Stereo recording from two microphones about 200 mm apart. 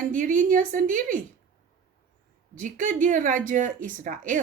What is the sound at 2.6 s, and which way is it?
Speech, 40° right (ahead or behind).